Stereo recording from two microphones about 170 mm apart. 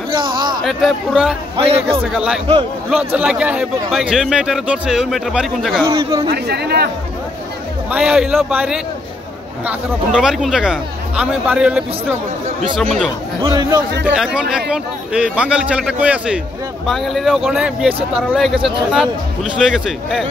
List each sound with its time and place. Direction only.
0.1 s a sound: 25° right (ahead or behind)
0.7 s speech: centre (ahead or behind)
5.9 s speech: 25° right (ahead or behind)
6.2 s speech: 70° right (ahead or behind)
7.9 s speech: 5° right (ahead or behind)
13.4 s speech: 20° right (ahead or behind)
14.0 s speech: 5° right (ahead or behind)
19.6 s speech: 5° right (ahead or behind)